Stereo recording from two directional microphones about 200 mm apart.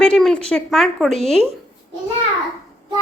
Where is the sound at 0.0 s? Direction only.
5° left (ahead or behind).